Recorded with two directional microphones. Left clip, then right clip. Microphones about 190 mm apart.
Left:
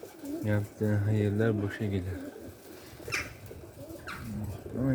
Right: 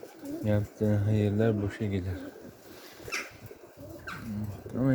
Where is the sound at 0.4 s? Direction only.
15° right (ahead or behind).